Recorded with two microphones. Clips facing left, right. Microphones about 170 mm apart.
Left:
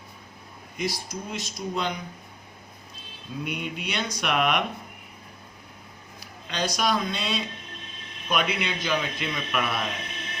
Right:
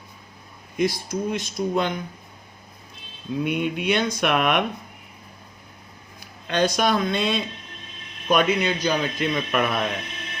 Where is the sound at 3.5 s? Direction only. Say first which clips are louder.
Right 9 dB; 55° right (ahead or behind).